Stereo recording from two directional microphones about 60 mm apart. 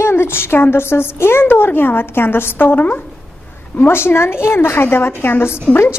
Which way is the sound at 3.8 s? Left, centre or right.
Left.